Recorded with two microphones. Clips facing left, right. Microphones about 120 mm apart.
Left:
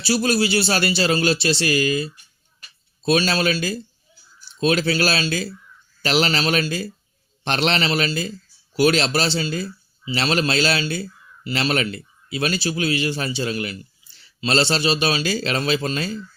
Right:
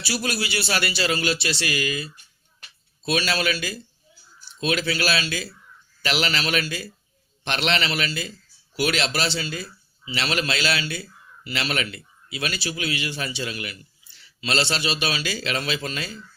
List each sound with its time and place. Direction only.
0.0 s speech: 30° left (ahead or behind)